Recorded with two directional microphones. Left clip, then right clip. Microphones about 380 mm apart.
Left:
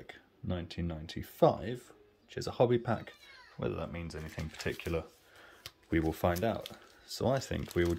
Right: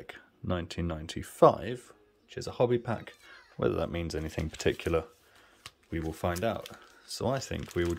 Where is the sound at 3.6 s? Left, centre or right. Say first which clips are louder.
Right 8 dB; centre.